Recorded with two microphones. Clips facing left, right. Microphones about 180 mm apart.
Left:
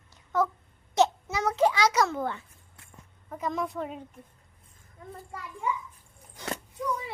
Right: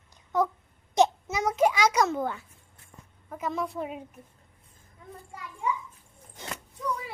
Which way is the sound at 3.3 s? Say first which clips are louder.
Even; 5° right (ahead or behind).